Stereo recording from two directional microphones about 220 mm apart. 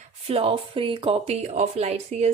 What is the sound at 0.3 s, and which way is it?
Speech, 25° right (ahead or behind).